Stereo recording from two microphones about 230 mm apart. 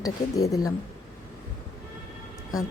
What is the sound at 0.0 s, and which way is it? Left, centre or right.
Speech, centre.